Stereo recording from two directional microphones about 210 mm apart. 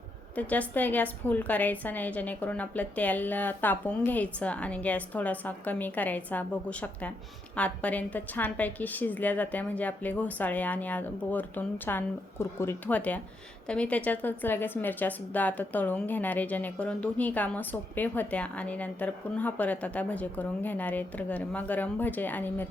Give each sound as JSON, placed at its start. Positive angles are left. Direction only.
{"t": 0.3, "sound": "a woman's voice", "side_deg": 5}